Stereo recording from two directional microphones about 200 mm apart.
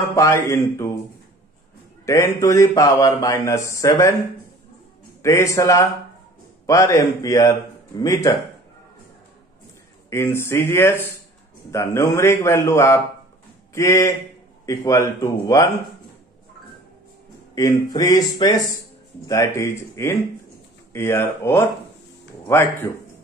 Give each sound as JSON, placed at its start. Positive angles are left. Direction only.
{"t": 0.1, "sound": "a man's voice", "side_deg": 15}
{"t": 2.0, "sound": "a man's voice", "side_deg": 15}
{"t": 5.2, "sound": "a man's voice", "side_deg": 15}
{"t": 10.0, "sound": "a man's voice", "side_deg": 15}
{"t": 17.6, "sound": "a man's voice", "side_deg": 15}